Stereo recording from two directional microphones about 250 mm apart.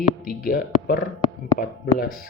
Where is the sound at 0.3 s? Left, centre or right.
Left.